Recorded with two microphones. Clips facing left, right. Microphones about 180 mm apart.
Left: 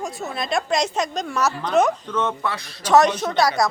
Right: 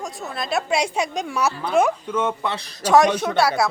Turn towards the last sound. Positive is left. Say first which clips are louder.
# even
turn(degrees=-10)  # may be behind; listen again after turning